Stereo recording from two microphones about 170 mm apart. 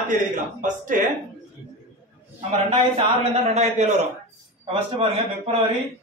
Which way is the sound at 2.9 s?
40° right (ahead or behind).